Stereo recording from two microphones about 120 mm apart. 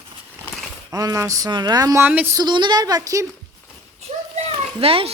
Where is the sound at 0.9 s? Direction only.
30° right (ahead or behind).